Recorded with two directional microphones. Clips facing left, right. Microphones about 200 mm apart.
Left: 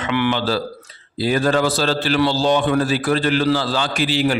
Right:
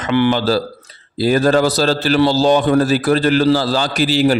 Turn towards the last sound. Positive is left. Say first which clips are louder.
# right 5 dB
turn(degrees=-40)  # may be behind; listen again after turning